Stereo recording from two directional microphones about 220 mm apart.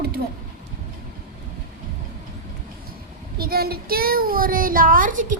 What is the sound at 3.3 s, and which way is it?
A child's voice, 45° right (ahead or behind).